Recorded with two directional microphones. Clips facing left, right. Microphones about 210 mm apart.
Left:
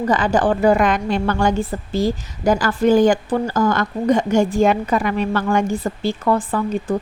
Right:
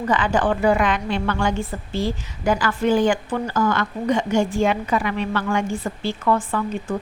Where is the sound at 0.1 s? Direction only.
40° left (ahead or behind).